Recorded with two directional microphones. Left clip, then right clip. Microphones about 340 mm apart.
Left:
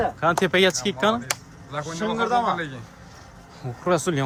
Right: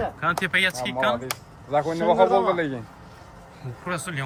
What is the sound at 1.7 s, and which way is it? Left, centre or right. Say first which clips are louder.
A man's voice: right 7 dB; centre.